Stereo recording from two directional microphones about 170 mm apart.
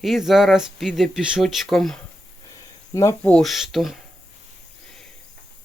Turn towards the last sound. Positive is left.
turn(degrees=0)  # may be behind; listen again after turning